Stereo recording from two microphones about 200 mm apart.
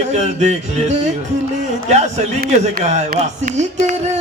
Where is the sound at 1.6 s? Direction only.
35° right (ahead or behind).